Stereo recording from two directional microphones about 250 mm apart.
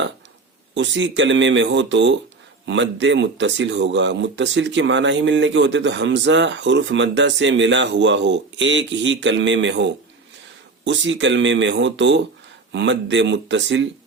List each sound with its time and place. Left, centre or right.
0.7 s speech: right